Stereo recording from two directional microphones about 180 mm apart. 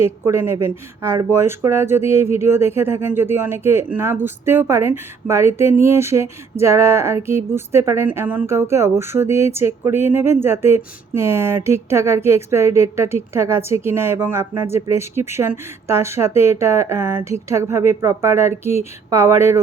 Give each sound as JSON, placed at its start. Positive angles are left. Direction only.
{"t": 0.0, "sound": "speech", "side_deg": -15}